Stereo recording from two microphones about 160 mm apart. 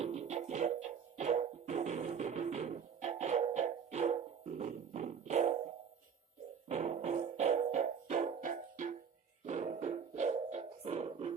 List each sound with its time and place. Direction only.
0.0 s music: 45° right (ahead or behind)
6.7 s music: 40° right (ahead or behind)